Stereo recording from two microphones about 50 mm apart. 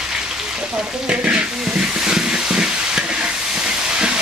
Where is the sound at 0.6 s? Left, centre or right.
Centre.